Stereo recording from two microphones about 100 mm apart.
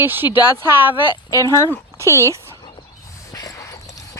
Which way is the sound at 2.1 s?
30° right (ahead or behind).